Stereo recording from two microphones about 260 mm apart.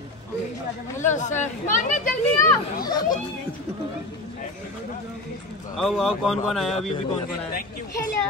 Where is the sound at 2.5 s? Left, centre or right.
Centre.